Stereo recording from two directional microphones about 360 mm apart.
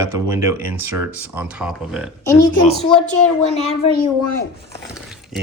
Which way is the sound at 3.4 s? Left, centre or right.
Centre.